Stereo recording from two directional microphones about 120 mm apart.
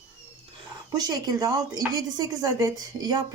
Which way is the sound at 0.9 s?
30° right (ahead or behind).